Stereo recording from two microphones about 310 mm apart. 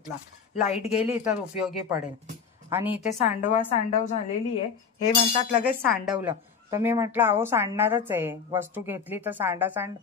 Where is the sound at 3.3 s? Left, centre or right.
Left.